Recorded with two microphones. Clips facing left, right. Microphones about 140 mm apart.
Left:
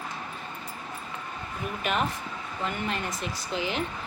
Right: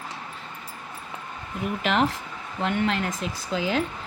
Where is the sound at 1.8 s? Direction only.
90° right.